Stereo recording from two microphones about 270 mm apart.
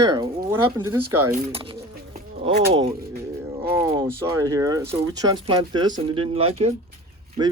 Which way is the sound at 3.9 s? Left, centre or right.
Centre.